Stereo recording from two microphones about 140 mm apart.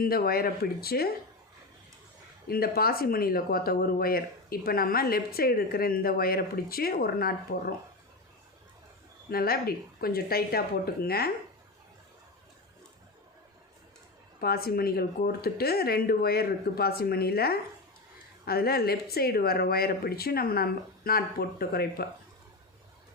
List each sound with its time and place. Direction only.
0.0 s speech: 90° left
2.5 s speech: 90° left
9.3 s speech: 90° left
14.4 s speech: 90° left